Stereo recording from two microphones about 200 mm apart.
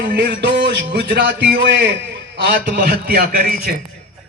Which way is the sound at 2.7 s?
50° right (ahead or behind).